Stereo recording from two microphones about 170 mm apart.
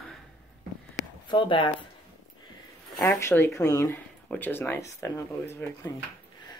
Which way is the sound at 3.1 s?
15° left (ahead or behind).